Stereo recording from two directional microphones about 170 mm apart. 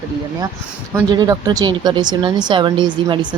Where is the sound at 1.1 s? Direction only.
25° right (ahead or behind).